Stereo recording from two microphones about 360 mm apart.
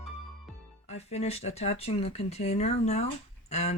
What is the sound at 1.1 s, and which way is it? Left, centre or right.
Speech, centre.